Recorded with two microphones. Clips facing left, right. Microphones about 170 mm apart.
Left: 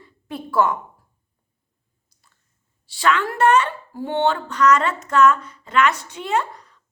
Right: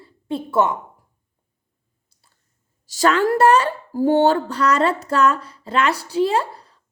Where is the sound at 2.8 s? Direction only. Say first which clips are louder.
Right 4 dB; 40° right (ahead or behind).